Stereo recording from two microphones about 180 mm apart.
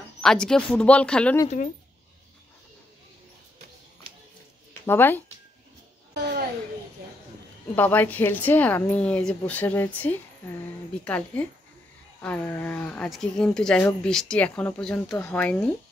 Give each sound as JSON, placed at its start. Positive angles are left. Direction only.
{"t": 0.2, "sound": "speech", "side_deg": 5}
{"t": 4.8, "sound": "speech", "side_deg": 10}
{"t": 6.1, "sound": "a sound", "side_deg": -70}
{"t": 7.7, "sound": "speech", "side_deg": 10}